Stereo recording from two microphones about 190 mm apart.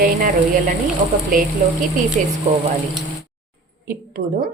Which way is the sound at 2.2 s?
40° right (ahead or behind).